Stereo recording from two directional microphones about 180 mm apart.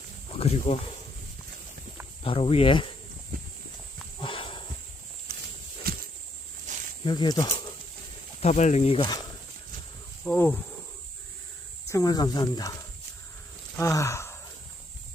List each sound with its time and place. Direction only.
0.3 s speech: 35° left (ahead or behind)
2.2 s speech: 30° left (ahead or behind)
3.3 s clip-clop: 55° right (ahead or behind)
4.2 s wild animals: 30° left (ahead or behind)
5.3 s a sound: 55° right (ahead or behind)
6.7 s snake: 45° right (ahead or behind)
7.0 s speech: 25° left (ahead or behind)
8.4 s speech: 40° left (ahead or behind)
10.2 s speech: 10° left (ahead or behind)
11.9 s speech: 20° left (ahead or behind)
13.7 s sigh: 15° left (ahead or behind)